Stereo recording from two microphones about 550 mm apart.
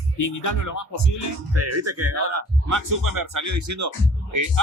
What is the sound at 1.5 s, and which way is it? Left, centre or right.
Speech, right.